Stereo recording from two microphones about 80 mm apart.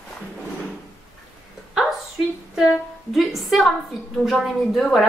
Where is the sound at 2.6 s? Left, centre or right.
Centre.